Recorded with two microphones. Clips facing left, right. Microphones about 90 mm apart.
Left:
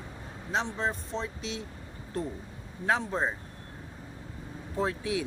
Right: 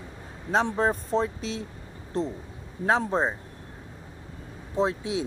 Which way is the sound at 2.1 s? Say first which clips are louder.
Right 5 dB; 25° right (ahead or behind).